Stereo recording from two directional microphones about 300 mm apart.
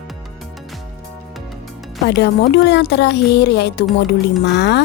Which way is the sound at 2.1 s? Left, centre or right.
Left.